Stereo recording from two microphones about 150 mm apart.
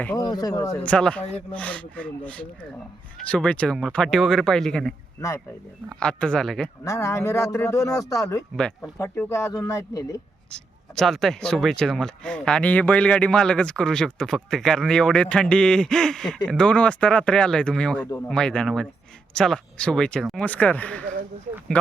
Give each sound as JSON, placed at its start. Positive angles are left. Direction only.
{"t": 0.3, "sound": "speech", "side_deg": 25}
{"t": 0.8, "sound": "speech", "side_deg": 10}
{"t": 6.8, "sound": "speech", "side_deg": 20}
{"t": 10.5, "sound": "speech", "side_deg": 5}